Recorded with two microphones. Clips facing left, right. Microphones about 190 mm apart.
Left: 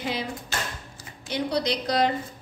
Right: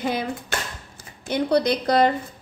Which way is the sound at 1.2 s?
55° right (ahead or behind).